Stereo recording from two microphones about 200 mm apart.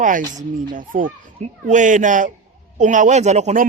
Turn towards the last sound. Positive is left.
turn(degrees=-35)  # may be behind; listen again after turning